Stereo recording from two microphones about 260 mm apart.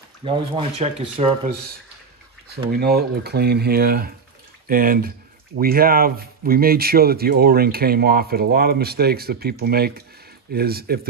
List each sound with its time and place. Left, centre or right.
0.2 s speech: centre
2.7 s speech: right